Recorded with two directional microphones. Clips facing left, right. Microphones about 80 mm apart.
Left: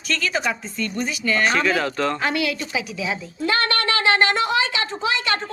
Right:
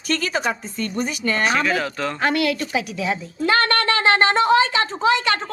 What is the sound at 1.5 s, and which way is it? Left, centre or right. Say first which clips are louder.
Speech: even; centre.